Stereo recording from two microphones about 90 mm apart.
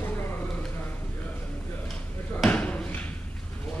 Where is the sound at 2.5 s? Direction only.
15° left (ahead or behind).